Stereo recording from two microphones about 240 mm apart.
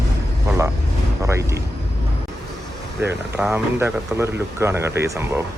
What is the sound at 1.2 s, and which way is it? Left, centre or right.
Speech, centre.